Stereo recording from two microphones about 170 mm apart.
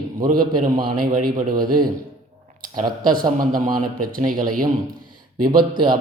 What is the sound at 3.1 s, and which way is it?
Speech, 55° right (ahead or behind).